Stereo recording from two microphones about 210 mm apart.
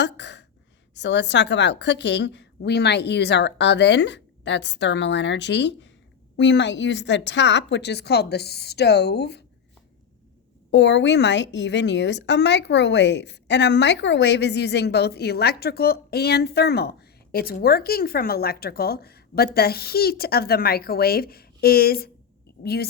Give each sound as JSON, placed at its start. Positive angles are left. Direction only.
{"t": 0.0, "sound": "gasp", "side_deg": 55}
{"t": 0.9, "sound": "a woman's voice", "side_deg": 55}
{"t": 10.7, "sound": "a woman's voice", "side_deg": 55}